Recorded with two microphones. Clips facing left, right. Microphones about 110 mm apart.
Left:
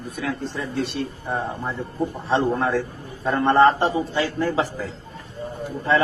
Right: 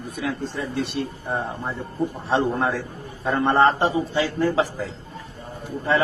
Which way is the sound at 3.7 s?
15° right (ahead or behind).